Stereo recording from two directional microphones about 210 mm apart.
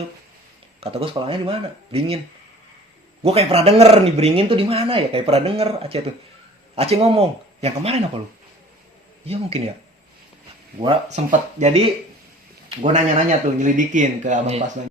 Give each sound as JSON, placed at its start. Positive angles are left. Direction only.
{"t": 0.8, "sound": "speech", "side_deg": -25}
{"t": 3.2, "sound": "speech", "side_deg": -30}
{"t": 9.2, "sound": "speech", "side_deg": -30}
{"t": 10.8, "sound": "speech", "side_deg": -25}